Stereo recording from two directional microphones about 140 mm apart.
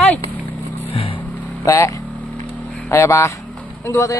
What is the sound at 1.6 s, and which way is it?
Speech, 20° left (ahead or behind).